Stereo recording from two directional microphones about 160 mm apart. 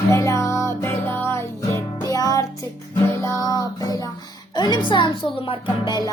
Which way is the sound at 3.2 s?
20° left (ahead or behind).